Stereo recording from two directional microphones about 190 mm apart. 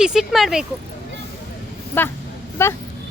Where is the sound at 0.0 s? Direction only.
Centre (ahead or behind).